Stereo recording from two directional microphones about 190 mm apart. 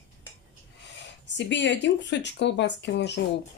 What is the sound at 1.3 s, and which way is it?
A woman's voice, 70° left (ahead or behind).